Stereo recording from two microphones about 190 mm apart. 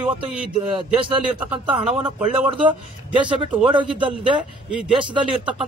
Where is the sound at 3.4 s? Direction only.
25° right (ahead or behind).